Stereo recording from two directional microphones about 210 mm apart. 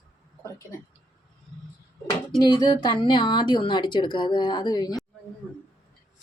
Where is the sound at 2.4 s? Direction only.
20° left (ahead or behind).